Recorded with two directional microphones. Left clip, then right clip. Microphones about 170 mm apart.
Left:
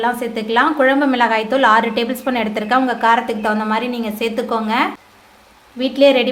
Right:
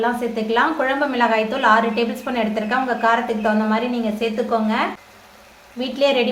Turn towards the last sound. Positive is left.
turn(degrees=40)  # may be behind; listen again after turning